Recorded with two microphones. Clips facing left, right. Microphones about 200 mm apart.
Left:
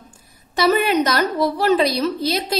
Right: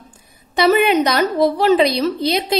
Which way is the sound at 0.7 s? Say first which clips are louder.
Right 3 dB; 15° right (ahead or behind).